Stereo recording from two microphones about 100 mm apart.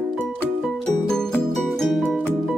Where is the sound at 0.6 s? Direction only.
5° left (ahead or behind).